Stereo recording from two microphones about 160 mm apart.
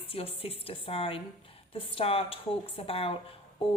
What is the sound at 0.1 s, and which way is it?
A woman's voice, 35° left (ahead or behind).